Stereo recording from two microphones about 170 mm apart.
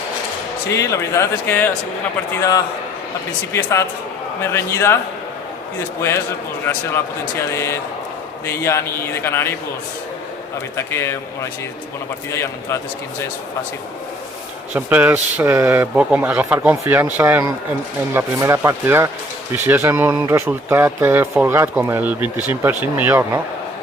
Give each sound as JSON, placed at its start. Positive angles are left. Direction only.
{"t": 0.7, "sound": "a man's voice", "side_deg": 20}
{"t": 6.0, "sound": "a man's voice", "side_deg": 15}
{"t": 10.8, "sound": "a man's voice", "side_deg": 15}
{"t": 12.3, "sound": "a man's voice", "side_deg": 15}
{"t": 14.7, "sound": "speech", "side_deg": -10}